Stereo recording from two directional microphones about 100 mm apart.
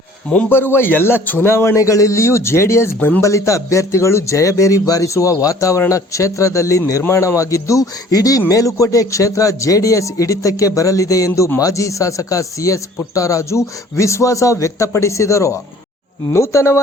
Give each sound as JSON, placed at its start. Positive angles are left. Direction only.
{"t": 0.5, "sound": "a man's voice", "side_deg": 20}